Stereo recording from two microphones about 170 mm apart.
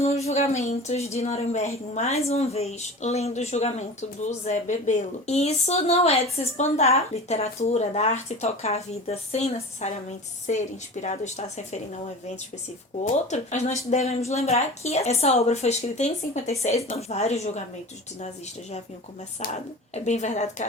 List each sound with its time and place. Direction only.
0.0 s a woman's voice: 40° left (ahead or behind)
13.1 s a woman's voice: 40° left (ahead or behind)
19.9 s a woman's voice: 40° left (ahead or behind)